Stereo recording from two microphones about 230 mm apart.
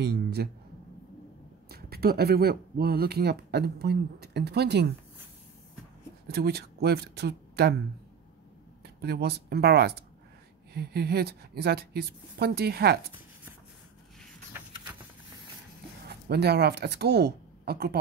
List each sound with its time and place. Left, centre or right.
0.0 s speech: right
1.7 s speech: right
6.2 s speech: right
9.0 s speech: right
14.5 s a sound: centre
16.1 s speech: right